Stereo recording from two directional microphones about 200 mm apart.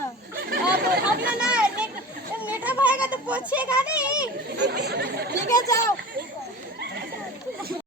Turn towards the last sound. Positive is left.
turn(degrees=15)  # may be behind; listen again after turning